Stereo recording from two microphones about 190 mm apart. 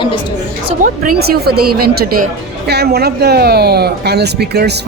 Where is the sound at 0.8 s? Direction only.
50° right (ahead or behind).